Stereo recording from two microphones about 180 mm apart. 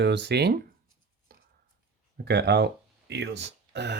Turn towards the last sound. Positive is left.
turn(degrees=-70)  # may be behind; listen again after turning